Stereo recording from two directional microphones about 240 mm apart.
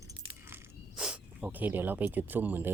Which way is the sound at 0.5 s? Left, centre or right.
Centre.